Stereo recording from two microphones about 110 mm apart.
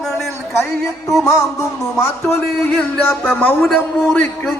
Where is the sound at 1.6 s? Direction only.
25° left (ahead or behind).